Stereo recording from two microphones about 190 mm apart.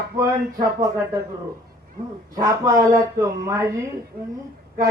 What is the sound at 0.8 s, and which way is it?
Speech, 15° right (ahead or behind).